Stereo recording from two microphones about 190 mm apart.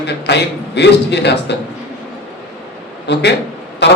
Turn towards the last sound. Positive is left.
turn(degrees=65)  # may be behind; listen again after turning